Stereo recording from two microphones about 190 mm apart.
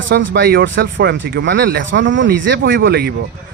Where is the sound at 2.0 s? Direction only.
80° right; by 3.1 s 55° right (ahead or behind).